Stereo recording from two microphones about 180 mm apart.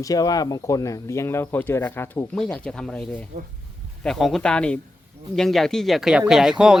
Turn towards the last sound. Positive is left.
turn(degrees=-5)  # may be behind; listen again after turning